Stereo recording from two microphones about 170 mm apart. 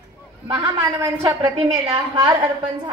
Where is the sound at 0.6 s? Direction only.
15° right (ahead or behind).